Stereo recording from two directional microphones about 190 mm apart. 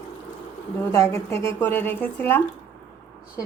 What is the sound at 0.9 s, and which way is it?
Speech, 15° left (ahead or behind).